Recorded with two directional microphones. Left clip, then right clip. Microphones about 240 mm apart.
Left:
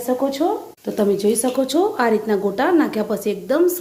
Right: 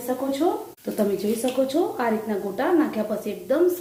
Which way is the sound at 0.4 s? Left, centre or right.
Left.